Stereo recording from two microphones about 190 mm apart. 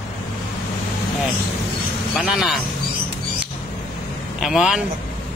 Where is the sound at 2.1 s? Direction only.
Centre (ahead or behind).